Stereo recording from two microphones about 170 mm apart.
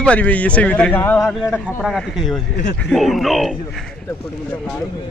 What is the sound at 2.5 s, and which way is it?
Speech, 75° left (ahead or behind).